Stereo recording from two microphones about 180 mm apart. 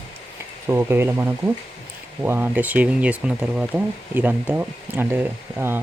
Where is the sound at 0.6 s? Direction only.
15° right (ahead or behind).